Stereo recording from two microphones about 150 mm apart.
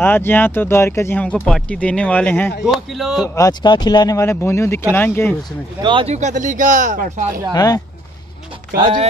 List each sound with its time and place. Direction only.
0.0 s speech: 15° left (ahead or behind)
2.6 s speech: centre (ahead or behind)
3.2 s speech: 25° left (ahead or behind)
5.8 s speech: 35° right (ahead or behind)
6.1 s speech: 55° right (ahead or behind)
7.5 s speech: 25° left (ahead or behind)
8.7 s speech: 30° right (ahead or behind)